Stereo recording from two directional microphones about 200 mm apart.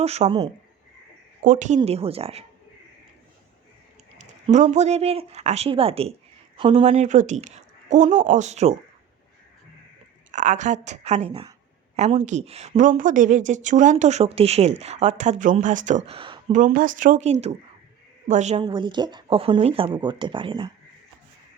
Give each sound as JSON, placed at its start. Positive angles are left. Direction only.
{"t": 0.0, "sound": "speech", "side_deg": -30}
{"t": 1.5, "sound": "a woman's voice", "side_deg": -40}
{"t": 4.2, "sound": "a woman's voice", "side_deg": -35}
{"t": 10.3, "sound": "a woman's voice", "side_deg": -35}
{"t": 16.5, "sound": "a woman's voice", "side_deg": -40}
{"t": 18.6, "sound": "speech", "side_deg": -20}